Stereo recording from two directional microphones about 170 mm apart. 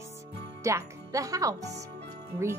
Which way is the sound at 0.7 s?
20° right (ahead or behind).